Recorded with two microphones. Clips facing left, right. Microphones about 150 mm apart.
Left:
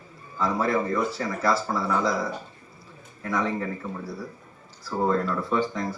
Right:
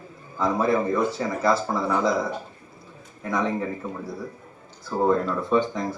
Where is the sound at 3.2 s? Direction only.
20° right (ahead or behind).